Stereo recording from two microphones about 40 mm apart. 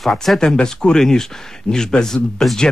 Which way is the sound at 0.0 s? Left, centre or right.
Centre.